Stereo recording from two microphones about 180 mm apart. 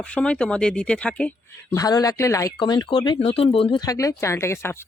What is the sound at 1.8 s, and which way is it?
Speech, 20° left (ahead or behind).